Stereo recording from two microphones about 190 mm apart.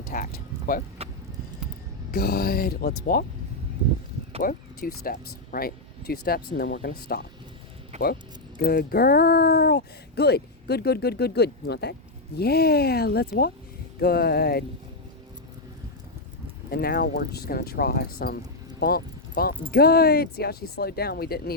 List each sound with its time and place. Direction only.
0.1 s speech: 45° left (ahead or behind)
1.0 s a sound: 30° right (ahead or behind)
2.1 s speech: 55° left (ahead or behind)
4.4 s speech: 50° left (ahead or behind)
7.9 s speech: 35° right (ahead or behind)
8.5 s speech: 55° left (ahead or behind)
16.7 s speech: 55° left (ahead or behind)